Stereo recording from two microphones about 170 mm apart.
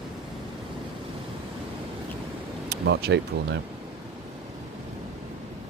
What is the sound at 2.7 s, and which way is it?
Speech, 70° right (ahead or behind).